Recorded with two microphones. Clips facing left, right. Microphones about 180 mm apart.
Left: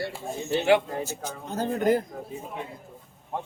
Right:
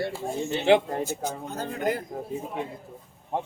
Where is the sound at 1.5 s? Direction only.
45° left (ahead or behind).